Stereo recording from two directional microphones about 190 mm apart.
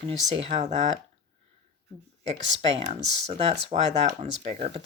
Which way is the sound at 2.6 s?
30° right (ahead or behind).